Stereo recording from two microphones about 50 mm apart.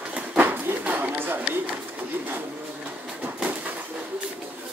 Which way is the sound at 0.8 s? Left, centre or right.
Right.